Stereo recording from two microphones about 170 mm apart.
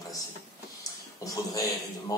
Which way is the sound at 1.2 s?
20° left (ahead or behind).